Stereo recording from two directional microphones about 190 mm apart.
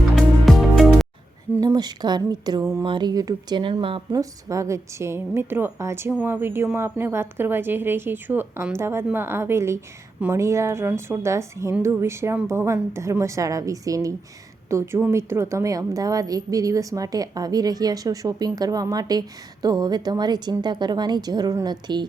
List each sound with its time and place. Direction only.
0.2 s music: centre (ahead or behind)
1.5 s a woman's voice: 20° right (ahead or behind)